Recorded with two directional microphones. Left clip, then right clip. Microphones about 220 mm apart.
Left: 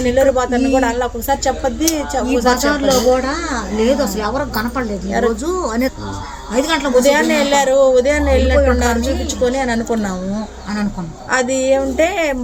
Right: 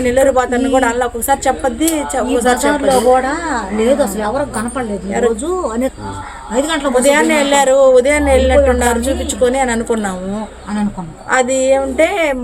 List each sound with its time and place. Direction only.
0.0 s speech: 15° right (ahead or behind)
2.6 s a woman's voice: 10° left (ahead or behind)
5.6 s a woman's voice: 15° left (ahead or behind)
7.0 s speech: 15° right (ahead or behind)
11.3 s speech: 10° right (ahead or behind)